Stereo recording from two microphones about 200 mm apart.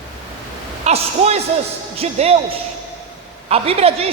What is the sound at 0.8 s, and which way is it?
A man's voice, 30° right (ahead or behind).